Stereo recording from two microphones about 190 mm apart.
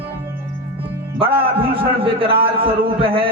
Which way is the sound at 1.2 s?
30° right (ahead or behind).